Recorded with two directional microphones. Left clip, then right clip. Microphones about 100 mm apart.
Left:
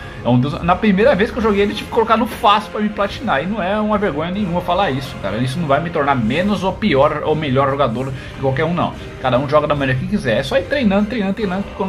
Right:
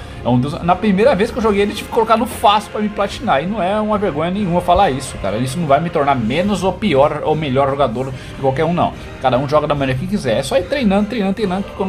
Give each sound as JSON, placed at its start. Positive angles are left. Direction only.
{"t": 0.2, "sound": "speech", "side_deg": -20}
{"t": 4.2, "sound": "speech", "side_deg": -50}
{"t": 5.4, "sound": "speech", "side_deg": -30}
{"t": 8.5, "sound": "speech", "side_deg": -35}